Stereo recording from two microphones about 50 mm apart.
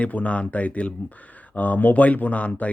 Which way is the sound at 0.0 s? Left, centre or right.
Left.